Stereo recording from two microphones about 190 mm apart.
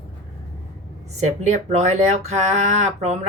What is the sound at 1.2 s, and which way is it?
Speech, 40° right (ahead or behind).